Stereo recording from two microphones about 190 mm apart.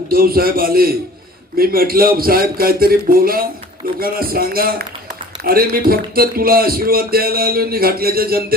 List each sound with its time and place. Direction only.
0.1 s speech: 50° right (ahead or behind)